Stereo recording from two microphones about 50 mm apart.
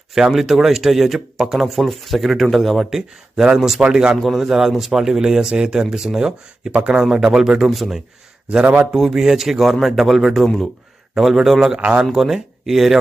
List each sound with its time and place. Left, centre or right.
0.1 s speech: centre
3.8 s speech: centre
4.2 s speech: centre
6.7 s speech: right
6.9 s speech: centre
11.8 s speech: right
12.1 s speech: centre